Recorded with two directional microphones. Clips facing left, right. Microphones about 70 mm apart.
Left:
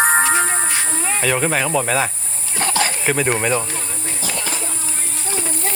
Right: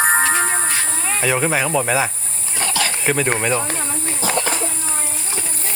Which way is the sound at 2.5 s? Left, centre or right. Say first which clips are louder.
Left 2 dB; left.